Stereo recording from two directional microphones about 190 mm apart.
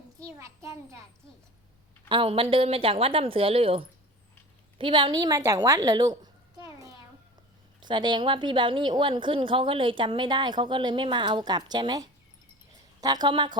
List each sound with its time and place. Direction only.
0.2 s a child's voice: 15° right (ahead or behind)
2.0 s a woman's voice: 25° right (ahead or behind)